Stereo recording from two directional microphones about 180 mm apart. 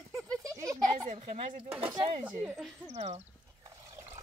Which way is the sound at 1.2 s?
35° right (ahead or behind).